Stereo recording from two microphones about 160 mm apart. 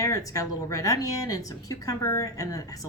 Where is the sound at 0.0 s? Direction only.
20° left (ahead or behind).